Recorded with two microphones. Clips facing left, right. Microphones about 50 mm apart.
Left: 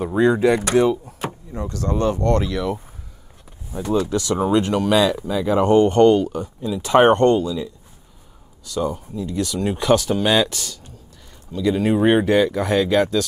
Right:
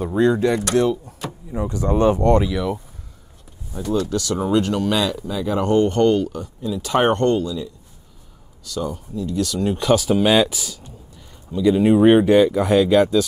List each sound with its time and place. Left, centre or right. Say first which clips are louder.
0.0 s speech: left 1 dB; centre
1.5 s speech: right 5 dB; centre
2.4 s speech: right 1 dB; centre
3.8 s speech: left 1 dB; centre
4.7 s speech: left 3 dB; centre; by 7.3 s left
7.3 s speech: left 1 dB; centre
8.7 s speech: left 2 dB; centre